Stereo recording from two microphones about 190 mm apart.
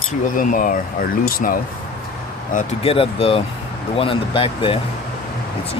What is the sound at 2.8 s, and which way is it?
Speech, 30° left (ahead or behind).